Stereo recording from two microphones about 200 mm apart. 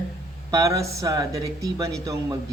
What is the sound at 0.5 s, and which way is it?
Speech, 15° right (ahead or behind).